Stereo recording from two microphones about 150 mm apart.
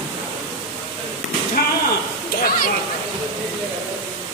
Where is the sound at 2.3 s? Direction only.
90° left.